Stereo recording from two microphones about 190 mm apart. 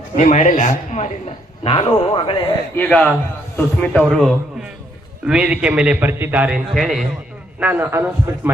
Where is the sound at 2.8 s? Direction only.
5° left (ahead or behind).